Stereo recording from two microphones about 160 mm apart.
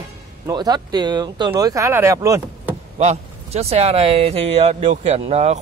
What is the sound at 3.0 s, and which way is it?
Speech, 45° right (ahead or behind).